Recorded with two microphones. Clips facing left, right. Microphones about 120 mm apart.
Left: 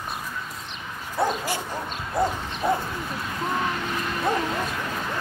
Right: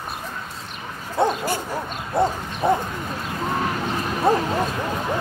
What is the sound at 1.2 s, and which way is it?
Owl, 25° right (ahead or behind).